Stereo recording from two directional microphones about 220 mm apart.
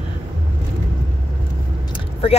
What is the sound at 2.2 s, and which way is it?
Speech, 25° left (ahead or behind).